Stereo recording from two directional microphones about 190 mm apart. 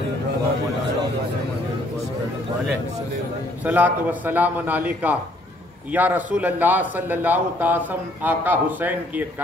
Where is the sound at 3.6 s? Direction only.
10° right (ahead or behind).